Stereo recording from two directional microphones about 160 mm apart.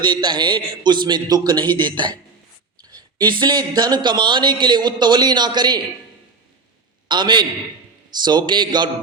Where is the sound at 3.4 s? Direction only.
25° right (ahead or behind).